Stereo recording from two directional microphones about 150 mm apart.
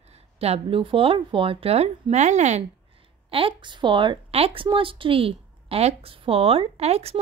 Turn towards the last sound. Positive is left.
turn(degrees=-45)  # may be behind; listen again after turning